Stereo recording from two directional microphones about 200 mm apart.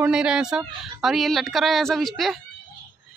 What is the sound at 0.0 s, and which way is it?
Speech, 5° right (ahead or behind).